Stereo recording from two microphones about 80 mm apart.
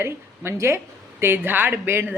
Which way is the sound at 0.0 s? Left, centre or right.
Right.